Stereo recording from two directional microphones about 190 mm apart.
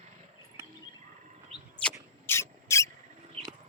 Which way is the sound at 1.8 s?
10° left (ahead or behind).